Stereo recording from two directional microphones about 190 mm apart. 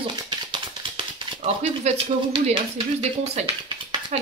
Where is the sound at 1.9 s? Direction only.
35° right (ahead or behind).